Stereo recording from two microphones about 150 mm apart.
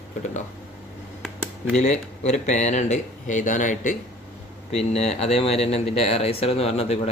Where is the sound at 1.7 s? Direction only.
50° left (ahead or behind).